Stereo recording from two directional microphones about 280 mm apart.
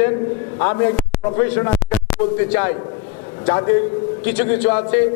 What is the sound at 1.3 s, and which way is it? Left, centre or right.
A man's voice, centre.